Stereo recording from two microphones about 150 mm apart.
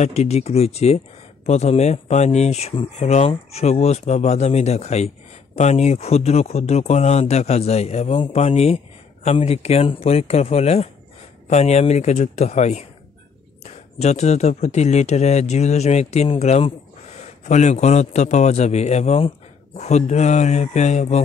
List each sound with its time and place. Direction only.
0.0 s a man's voice: 45° left (ahead or behind)